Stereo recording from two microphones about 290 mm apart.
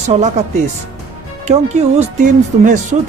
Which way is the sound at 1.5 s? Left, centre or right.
Right.